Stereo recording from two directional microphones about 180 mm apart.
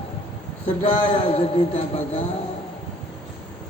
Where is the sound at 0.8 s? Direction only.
30° left (ahead or behind).